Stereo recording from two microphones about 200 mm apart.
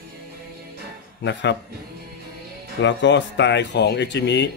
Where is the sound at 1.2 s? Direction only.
60° left (ahead or behind).